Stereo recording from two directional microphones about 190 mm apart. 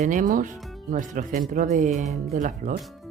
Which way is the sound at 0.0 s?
40° right (ahead or behind).